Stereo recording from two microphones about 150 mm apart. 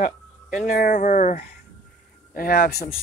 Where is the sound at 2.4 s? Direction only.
80° left.